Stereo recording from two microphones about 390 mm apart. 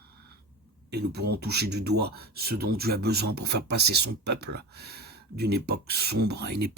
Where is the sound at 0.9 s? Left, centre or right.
Right.